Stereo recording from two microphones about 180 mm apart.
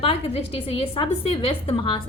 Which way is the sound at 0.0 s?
30° left (ahead or behind).